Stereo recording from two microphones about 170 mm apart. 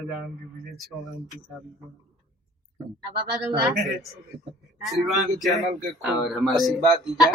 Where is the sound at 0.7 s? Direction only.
Centre (ahead or behind).